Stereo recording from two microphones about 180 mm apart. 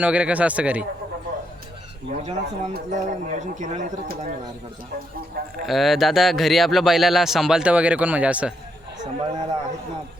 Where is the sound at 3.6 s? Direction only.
45° right (ahead or behind).